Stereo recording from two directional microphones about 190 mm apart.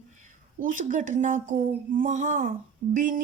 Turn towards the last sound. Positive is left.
turn(degrees=-45)  # may be behind; listen again after turning